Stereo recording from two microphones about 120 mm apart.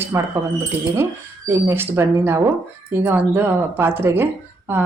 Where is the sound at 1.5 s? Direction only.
20° right (ahead or behind).